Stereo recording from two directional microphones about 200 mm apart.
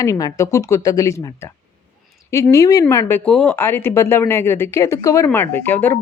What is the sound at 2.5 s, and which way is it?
A woman's voice, 15° left (ahead or behind).